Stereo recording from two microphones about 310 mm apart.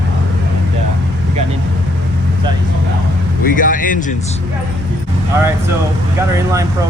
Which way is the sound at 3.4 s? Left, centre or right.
Left.